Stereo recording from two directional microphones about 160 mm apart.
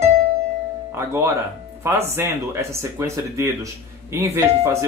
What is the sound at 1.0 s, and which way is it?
Speech, 15° right (ahead or behind).